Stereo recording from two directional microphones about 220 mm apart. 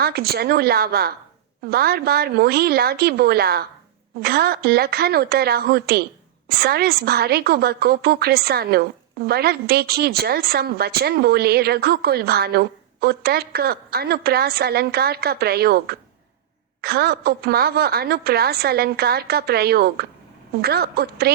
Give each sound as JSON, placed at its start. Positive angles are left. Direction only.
{"t": 0.0, "sound": "a woman's voice", "side_deg": -45}